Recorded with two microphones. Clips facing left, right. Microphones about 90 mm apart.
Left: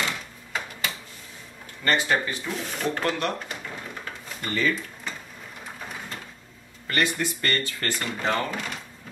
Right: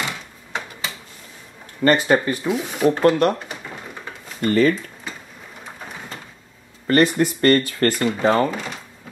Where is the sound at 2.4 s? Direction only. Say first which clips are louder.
Right 10 dB; 10° right (ahead or behind).